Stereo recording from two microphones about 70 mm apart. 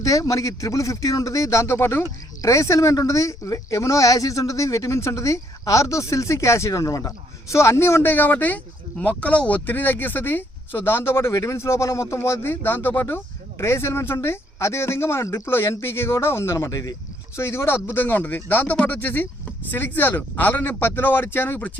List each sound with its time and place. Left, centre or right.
0.0 s speech: left
2.4 s speech: left
8.1 s speech: left
17.3 s speech: left